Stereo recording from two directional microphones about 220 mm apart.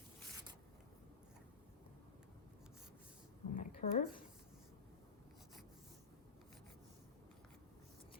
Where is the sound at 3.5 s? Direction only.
40° left (ahead or behind).